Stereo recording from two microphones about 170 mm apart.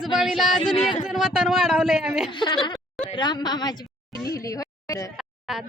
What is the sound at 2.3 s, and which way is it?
A woman's voice, 25° left (ahead or behind).